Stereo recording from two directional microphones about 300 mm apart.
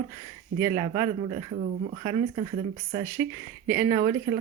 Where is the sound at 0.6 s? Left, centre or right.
Centre.